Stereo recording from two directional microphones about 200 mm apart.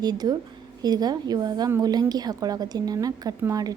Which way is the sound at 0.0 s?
20° right (ahead or behind).